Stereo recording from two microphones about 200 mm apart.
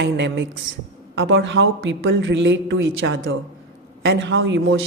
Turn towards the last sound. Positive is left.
turn(degrees=-70)  # may be behind; listen again after turning